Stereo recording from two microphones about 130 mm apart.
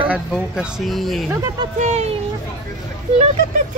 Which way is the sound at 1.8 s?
55° right (ahead or behind).